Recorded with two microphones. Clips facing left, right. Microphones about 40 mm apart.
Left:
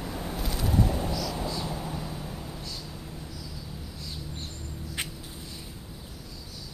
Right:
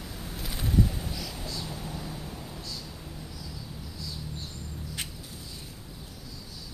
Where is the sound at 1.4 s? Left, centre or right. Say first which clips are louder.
Left 5 dB; centre.